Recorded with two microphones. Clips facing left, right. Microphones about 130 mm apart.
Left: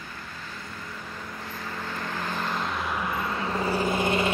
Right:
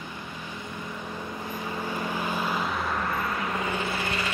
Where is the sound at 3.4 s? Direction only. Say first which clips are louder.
Left 3 dB; 35° left (ahead or behind).